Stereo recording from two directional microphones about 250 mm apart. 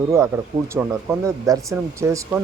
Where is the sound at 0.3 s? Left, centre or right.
Centre.